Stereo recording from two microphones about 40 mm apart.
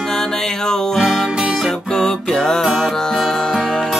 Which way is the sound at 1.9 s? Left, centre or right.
Centre.